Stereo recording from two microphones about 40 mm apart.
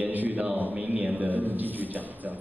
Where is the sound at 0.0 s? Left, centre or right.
Right.